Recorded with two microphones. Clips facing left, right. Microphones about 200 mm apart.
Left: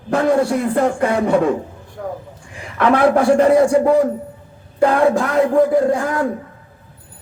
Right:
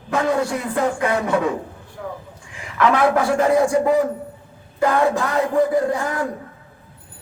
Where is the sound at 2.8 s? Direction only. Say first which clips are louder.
Left 3 dB; 55° left (ahead or behind).